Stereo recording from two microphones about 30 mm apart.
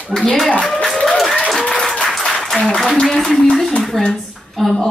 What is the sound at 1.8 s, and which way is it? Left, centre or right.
Applause, centre.